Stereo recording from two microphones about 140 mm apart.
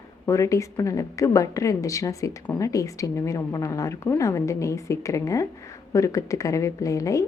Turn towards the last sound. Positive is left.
turn(degrees=25)  # may be behind; listen again after turning